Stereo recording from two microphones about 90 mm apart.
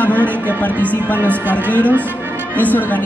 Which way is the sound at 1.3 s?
20° left (ahead or behind).